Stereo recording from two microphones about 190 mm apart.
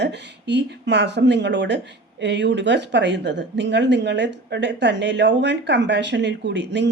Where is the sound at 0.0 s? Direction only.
65° right (ahead or behind).